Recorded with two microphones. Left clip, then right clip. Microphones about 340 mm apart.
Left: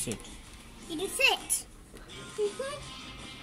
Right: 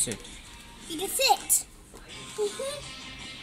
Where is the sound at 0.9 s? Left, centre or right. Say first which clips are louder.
Right 2 dB; centre.